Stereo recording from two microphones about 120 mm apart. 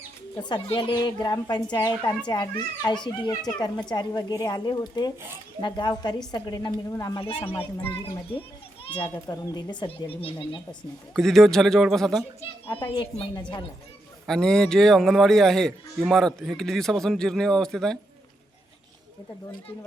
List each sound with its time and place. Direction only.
0.3 s a child's voice: 35° left (ahead or behind)
7.2 s speech: 45° left (ahead or behind)
8.9 s a child's voice: 40° left (ahead or behind)
9.1 s a child's voice: 30° left (ahead or behind)
10.1 s speech: 50° left (ahead or behind)
11.1 s speech: 5° left (ahead or behind)
12.6 s a child's voice: 50° left (ahead or behind)
14.3 s speech: 5° left (ahead or behind)